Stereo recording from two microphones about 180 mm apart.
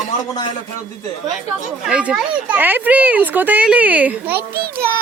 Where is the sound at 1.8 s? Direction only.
5° right (ahead or behind).